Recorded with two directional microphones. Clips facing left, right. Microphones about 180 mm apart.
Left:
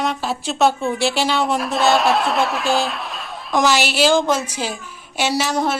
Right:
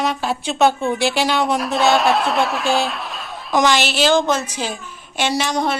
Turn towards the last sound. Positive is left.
turn(degrees=5)  # may be behind; listen again after turning